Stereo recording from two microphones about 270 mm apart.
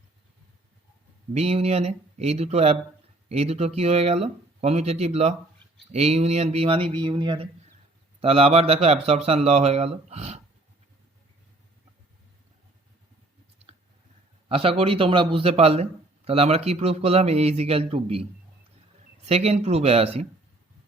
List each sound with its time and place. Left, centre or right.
1.3 s a man's voice: right
14.4 s a man's voice: right